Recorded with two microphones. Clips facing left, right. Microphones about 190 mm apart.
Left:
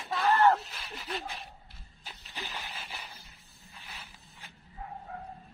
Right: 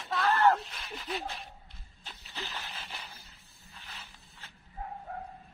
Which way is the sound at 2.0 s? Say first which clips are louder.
Even; 15° left (ahead or behind).